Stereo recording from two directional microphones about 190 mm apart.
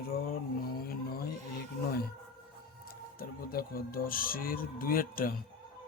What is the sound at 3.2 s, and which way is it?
Speech, 50° left (ahead or behind).